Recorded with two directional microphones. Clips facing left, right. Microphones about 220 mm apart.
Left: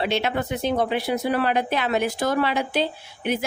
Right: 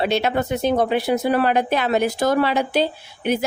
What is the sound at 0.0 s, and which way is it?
Speech, 40° right (ahead or behind).